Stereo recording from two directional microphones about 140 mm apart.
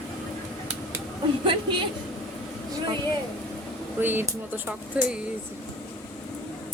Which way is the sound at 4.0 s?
15° right (ahead or behind).